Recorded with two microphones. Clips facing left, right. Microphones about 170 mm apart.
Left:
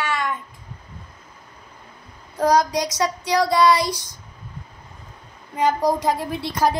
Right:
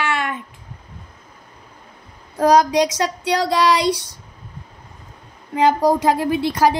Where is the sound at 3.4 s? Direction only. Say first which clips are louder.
Right 1 dB; 70° right (ahead or behind).